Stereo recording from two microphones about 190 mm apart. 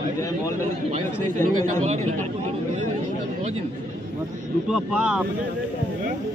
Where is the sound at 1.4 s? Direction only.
40° right (ahead or behind).